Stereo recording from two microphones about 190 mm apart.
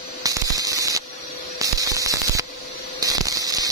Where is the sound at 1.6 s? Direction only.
15° right (ahead or behind).